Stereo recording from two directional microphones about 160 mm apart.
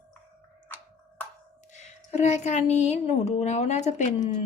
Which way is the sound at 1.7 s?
45° left (ahead or behind).